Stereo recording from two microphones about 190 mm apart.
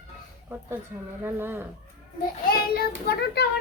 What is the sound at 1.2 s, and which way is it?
Speech, 10° right (ahead or behind).